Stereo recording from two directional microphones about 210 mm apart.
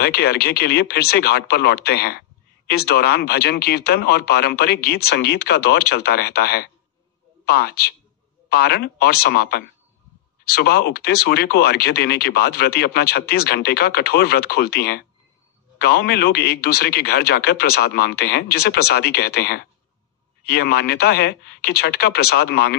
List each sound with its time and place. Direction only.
0.0 s speech: 50° left (ahead or behind)